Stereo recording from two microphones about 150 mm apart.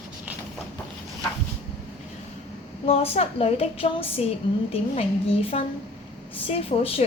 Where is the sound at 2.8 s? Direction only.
40° left (ahead or behind).